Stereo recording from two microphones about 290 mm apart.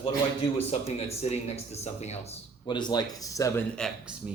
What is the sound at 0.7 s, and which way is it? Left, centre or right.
Speech, left.